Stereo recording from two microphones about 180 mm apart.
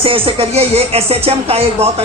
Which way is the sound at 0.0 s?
30° right (ahead or behind).